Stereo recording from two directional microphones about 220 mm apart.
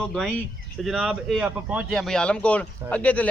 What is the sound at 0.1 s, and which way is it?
Speech, centre (ahead or behind).